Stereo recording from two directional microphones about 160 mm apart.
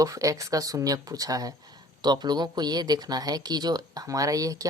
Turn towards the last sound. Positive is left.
turn(degrees=-20)  # may be behind; listen again after turning